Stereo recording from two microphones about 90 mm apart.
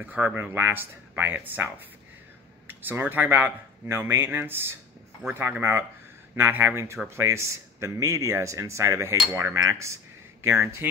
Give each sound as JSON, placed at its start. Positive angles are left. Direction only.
{"t": 0.0, "sound": "speech", "side_deg": -20}